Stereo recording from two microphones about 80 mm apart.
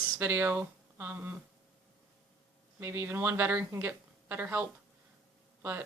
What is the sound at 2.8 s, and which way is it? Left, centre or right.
Speech, right.